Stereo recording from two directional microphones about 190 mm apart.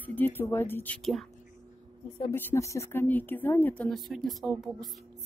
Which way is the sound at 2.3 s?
10° left (ahead or behind).